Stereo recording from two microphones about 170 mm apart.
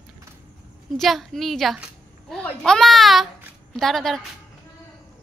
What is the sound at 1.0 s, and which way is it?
Speech, centre (ahead or behind).